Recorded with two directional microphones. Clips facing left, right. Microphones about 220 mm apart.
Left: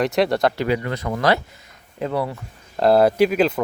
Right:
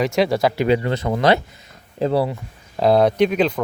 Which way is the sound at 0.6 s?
25° right (ahead or behind).